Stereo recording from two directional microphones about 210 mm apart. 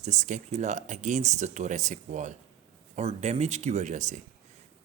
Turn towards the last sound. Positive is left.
turn(degrees=-35)  # may be behind; listen again after turning